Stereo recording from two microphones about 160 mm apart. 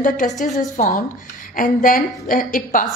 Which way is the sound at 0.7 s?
55° left (ahead or behind).